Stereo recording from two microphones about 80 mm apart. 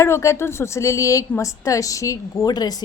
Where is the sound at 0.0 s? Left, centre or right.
Left.